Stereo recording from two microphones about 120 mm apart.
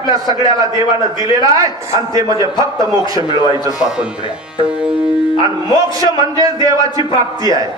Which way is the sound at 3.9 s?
10° right (ahead or behind).